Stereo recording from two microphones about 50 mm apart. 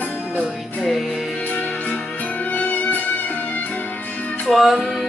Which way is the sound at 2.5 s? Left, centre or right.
Left.